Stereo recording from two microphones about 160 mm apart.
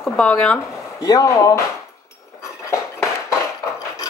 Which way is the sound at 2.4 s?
20° left (ahead or behind).